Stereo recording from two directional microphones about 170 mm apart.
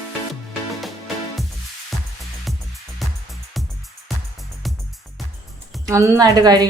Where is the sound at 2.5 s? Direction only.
Centre (ahead or behind).